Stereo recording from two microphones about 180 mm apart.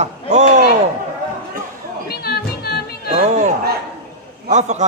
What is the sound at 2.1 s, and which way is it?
Music, 60° left (ahead or behind).